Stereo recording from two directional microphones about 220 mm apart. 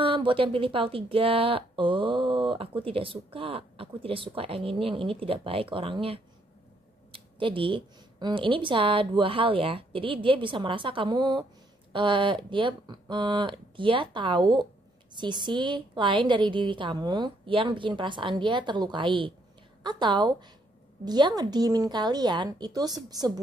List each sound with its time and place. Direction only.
0.0 s a woman's voice: 25° right (ahead or behind)